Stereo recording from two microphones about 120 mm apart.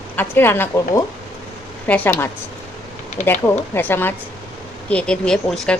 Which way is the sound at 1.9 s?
15° left (ahead or behind).